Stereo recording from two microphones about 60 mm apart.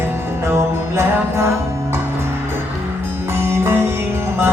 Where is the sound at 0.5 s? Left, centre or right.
Right.